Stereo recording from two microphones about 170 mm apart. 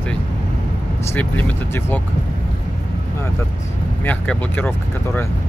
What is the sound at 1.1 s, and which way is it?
Speech, 10° left (ahead or behind).